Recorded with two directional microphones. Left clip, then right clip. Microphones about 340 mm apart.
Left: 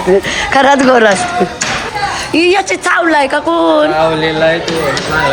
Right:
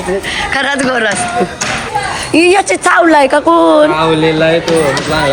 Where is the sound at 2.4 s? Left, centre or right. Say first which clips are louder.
Right 2 dB; centre.